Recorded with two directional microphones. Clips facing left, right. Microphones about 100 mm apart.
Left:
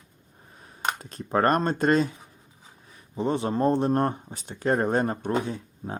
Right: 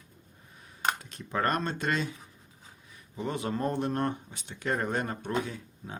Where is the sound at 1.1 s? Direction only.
40° left (ahead or behind).